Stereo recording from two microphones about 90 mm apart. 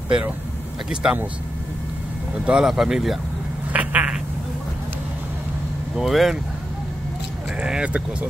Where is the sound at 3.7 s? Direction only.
15° right (ahead or behind).